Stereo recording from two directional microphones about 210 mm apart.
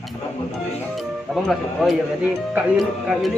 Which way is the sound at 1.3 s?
Centre (ahead or behind).